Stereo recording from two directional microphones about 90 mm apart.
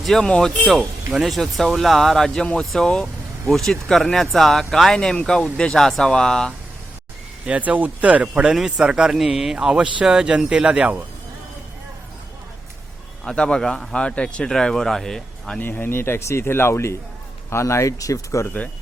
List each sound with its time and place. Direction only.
0.0 s speech: 5° left (ahead or behind)
7.4 s speech: 15° right (ahead or behind)
13.2 s speech: 10° left (ahead or behind)
15.6 s speech: 25° left (ahead or behind)